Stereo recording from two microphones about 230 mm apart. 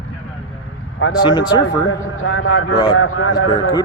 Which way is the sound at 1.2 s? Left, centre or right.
Centre.